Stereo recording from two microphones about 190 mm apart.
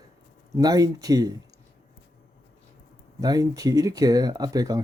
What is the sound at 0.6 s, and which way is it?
Speech, 20° right (ahead or behind).